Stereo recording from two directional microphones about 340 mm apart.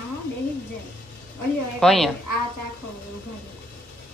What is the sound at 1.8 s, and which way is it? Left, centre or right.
Speech, centre.